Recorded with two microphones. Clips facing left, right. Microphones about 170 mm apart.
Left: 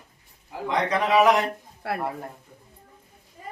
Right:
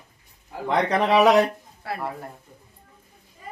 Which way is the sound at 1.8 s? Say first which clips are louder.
Left 2 dB; 60° left (ahead or behind).